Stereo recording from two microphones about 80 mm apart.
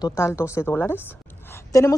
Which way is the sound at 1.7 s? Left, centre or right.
Left.